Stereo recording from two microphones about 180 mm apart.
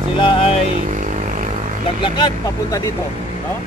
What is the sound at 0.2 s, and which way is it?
Speech, 30° left (ahead or behind).